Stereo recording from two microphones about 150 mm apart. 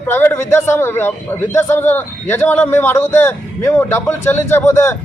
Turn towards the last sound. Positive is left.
turn(degrees=20)  # may be behind; listen again after turning